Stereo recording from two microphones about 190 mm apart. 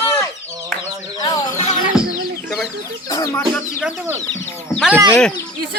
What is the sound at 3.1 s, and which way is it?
Chicken, 15° left (ahead or behind).